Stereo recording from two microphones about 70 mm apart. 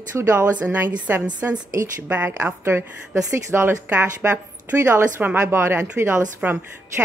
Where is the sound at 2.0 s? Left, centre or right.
Right.